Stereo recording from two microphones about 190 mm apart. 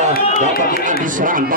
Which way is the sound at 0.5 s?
50° left (ahead or behind).